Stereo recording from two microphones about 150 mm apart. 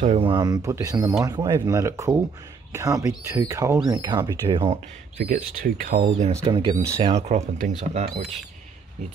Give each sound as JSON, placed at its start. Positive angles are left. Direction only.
{"t": 0.2, "sound": "speech", "side_deg": -30}
{"t": 5.3, "sound": "speech", "side_deg": -70}
{"t": 6.3, "sound": "speech", "side_deg": -30}